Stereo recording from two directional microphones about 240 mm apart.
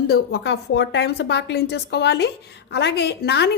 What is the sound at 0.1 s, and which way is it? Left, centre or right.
Speech, left.